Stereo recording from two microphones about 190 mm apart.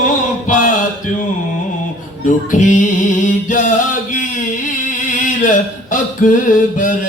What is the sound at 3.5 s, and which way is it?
Mantra, 45° left (ahead or behind).